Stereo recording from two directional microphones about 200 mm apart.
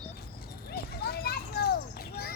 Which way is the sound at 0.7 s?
50° left (ahead or behind).